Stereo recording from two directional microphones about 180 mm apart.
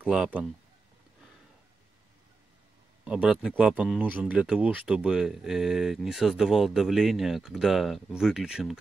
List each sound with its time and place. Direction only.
0.0 s speech: 5° right (ahead or behind)
3.1 s speech: 5° right (ahead or behind)